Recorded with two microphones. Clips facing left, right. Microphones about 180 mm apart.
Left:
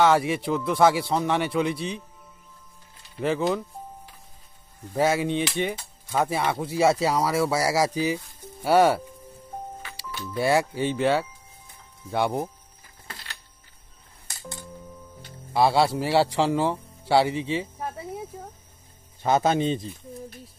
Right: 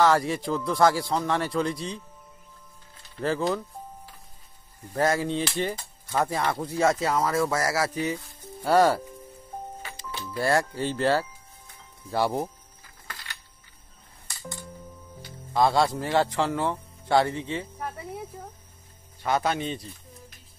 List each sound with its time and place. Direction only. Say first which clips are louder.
0.0 s a man's voice: left 2 dB; 5° left (ahead or behind)
3.2 s a man's voice: left 2 dB; 15° left (ahead or behind)
4.9 s a man's voice: left 2 dB; 5° left (ahead or behind)
10.3 s a man's voice: left 2 dB; 5° left (ahead or behind)
13.0 s a sound: left 1 dB; 25° left (ahead or behind)
15.5 s a man's voice: left 2 dB; 10° left (ahead or behind)
17.5 s a sound: left 3 dB; 10° left (ahead or behind)
19.2 s speech: left 5 dB; 25° left (ahead or behind)